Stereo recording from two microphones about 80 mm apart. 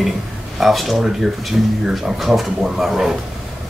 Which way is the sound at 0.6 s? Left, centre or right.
Centre.